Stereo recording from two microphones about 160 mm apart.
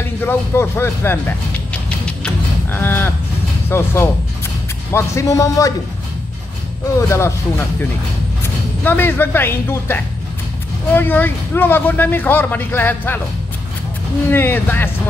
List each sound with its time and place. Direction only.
0.2 s speech: 15° left (ahead or behind)
2.2 s livestock: 15° left (ahead or behind)
3.7 s a man's voice: 15° left (ahead or behind)
7.0 s speech: 15° left (ahead or behind)
8.8 s speech: 15° left (ahead or behind)
14.3 s speech: 15° left (ahead or behind)